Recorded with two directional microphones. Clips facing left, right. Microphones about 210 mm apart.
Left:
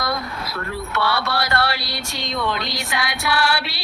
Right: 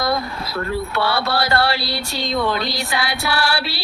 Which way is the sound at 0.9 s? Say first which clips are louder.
Right 1 dB; 30° right (ahead or behind).